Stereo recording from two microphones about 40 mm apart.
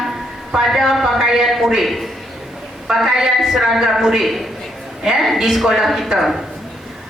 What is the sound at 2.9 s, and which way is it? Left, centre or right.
A woman's voice, centre.